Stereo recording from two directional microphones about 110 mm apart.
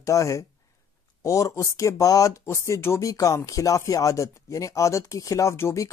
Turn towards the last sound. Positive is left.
turn(degrees=25)  # may be behind; listen again after turning